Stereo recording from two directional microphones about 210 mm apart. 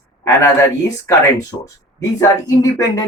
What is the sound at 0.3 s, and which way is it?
Speech, 15° left (ahead or behind).